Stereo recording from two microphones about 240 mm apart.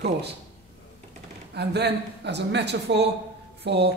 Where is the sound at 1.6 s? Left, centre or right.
Right.